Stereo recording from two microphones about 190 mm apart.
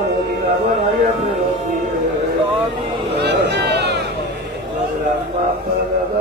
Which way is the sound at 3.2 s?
60° right (ahead or behind).